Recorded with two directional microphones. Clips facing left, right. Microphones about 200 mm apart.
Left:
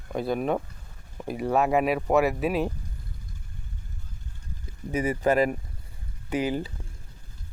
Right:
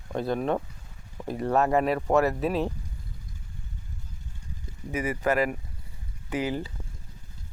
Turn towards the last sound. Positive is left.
turn(degrees=15)  # may be behind; listen again after turning